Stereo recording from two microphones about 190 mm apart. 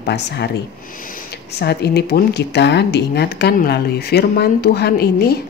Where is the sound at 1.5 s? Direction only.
60° left (ahead or behind).